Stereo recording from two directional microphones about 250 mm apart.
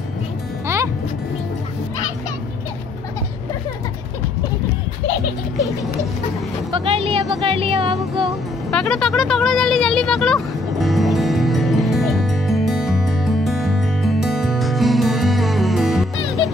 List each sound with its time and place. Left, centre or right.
6.7 s music: right
8.6 s vehicle: centre